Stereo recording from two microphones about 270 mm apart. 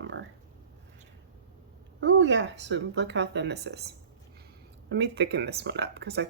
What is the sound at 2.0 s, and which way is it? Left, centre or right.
Speech, right.